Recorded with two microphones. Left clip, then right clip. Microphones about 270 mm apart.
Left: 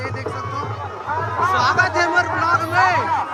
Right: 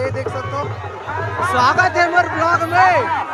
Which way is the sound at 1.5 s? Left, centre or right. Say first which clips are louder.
Right 5 dB; centre.